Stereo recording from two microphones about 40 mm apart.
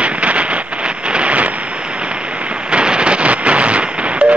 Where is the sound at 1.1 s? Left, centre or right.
Right.